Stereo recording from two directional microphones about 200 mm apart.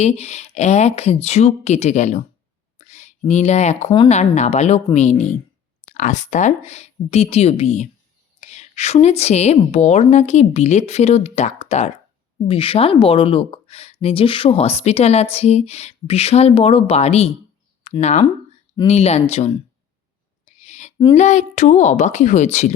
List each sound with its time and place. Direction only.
0.0 s speech: 35° left (ahead or behind)
20.6 s speech: 35° left (ahead or behind)